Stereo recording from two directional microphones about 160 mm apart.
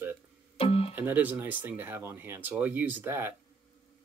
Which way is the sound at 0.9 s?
10° right (ahead or behind).